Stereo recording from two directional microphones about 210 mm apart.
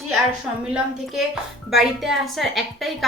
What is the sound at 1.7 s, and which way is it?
A woman's voice, centre (ahead or behind).